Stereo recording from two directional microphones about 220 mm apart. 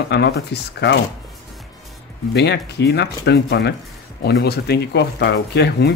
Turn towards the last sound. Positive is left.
turn(degrees=50)  # may be behind; listen again after turning